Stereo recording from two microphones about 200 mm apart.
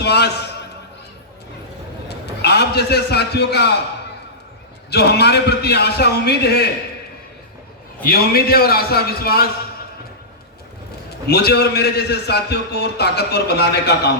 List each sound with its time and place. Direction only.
0.0 s a man's voice: 55° left (ahead or behind)
2.0 s a man's voice: 55° left (ahead or behind)
4.9 s a man's voice: 55° left (ahead or behind)
8.0 s a man's voice: 50° left (ahead or behind)
11.3 s a man's voice: 55° left (ahead or behind)